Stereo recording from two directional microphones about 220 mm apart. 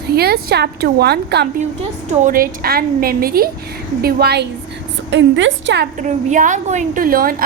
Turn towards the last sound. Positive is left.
turn(degrees=-40)  # may be behind; listen again after turning